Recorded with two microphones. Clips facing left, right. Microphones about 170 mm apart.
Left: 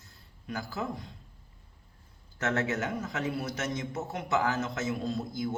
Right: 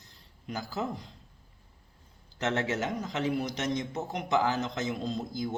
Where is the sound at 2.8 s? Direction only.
20° right (ahead or behind).